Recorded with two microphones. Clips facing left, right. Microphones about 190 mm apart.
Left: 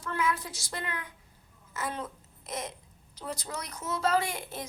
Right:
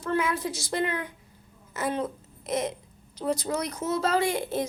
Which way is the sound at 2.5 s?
70° right (ahead or behind).